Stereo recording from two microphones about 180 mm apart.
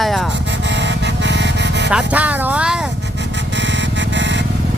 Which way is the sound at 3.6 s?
80° right.